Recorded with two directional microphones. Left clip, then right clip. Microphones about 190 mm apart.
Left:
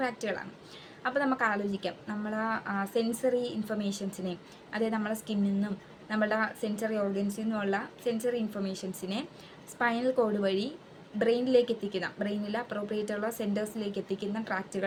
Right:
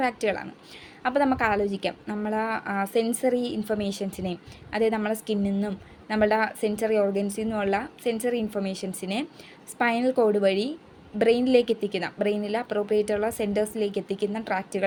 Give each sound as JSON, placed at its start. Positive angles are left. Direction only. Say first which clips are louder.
{"t": 0.0, "sound": "a woman's voice", "louder": "right 7 dB", "side_deg": -50}